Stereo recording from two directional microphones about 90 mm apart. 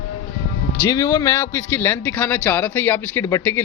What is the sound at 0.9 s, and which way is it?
Speech, 35° left (ahead or behind).